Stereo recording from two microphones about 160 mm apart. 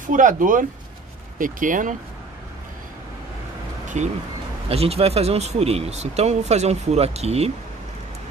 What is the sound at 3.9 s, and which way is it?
Speech, 45° right (ahead or behind).